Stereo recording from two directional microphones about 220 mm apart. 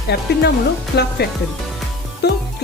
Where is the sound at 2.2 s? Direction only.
50° left (ahead or behind).